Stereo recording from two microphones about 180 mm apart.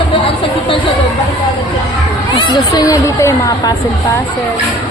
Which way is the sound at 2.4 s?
20° left (ahead or behind).